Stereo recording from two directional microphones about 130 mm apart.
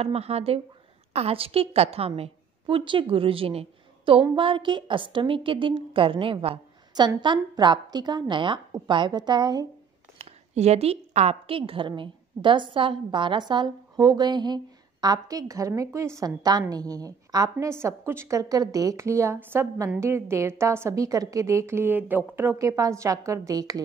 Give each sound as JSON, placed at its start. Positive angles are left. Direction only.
{"t": 0.0, "sound": "a woman's voice", "side_deg": -50}
{"t": 10.1, "sound": "a woman's voice", "side_deg": -55}